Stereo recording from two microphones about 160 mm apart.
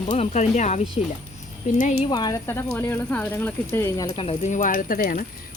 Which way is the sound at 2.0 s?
25° left (ahead or behind).